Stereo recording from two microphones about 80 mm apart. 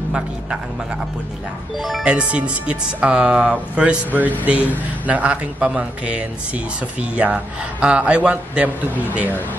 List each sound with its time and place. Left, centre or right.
1.8 s speech: centre
2.0 s a man's voice: centre